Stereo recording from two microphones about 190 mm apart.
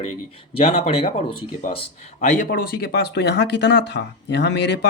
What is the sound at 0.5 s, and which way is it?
Speech, 30° left (ahead or behind).